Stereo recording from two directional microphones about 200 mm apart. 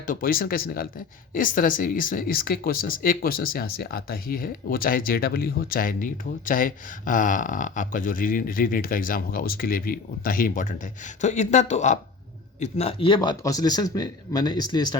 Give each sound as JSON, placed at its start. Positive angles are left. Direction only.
{"t": 0.0, "sound": "speech", "side_deg": 45}